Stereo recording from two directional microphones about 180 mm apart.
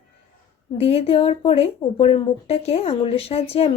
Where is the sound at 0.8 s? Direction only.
35° left (ahead or behind).